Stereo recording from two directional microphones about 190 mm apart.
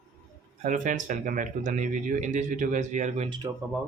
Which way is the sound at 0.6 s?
40° right (ahead or behind).